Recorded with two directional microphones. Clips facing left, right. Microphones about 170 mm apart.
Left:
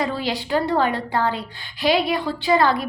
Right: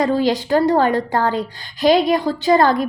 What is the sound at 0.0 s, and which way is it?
A woman's voice, 45° right (ahead or behind).